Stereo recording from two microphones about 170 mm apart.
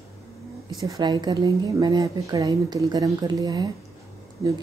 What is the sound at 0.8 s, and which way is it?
A woman's voice, 25° right (ahead or behind).